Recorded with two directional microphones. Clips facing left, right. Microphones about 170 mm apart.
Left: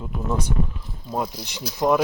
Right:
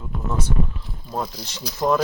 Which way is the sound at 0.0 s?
15° left (ahead or behind).